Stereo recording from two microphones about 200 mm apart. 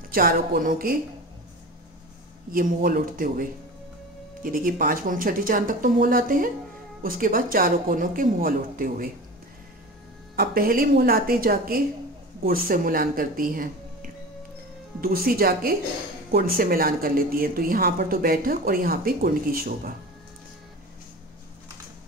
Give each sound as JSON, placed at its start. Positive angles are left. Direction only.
{"t": 0.1, "sound": "speech", "side_deg": -50}
{"t": 2.5, "sound": "speech", "side_deg": -45}
{"t": 10.3, "sound": "speech", "side_deg": -50}